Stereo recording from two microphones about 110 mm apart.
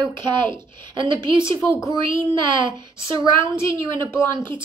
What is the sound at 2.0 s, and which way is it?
A woman's voice, 45° right (ahead or behind).